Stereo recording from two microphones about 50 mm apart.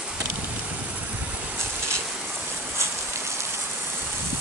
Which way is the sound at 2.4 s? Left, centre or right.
Right.